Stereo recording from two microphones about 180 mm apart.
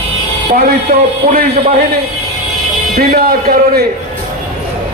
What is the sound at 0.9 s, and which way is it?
Speech, 60° right (ahead or behind).